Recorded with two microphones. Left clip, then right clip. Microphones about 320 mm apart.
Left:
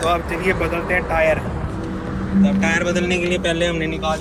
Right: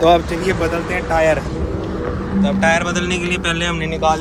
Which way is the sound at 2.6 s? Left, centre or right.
Centre.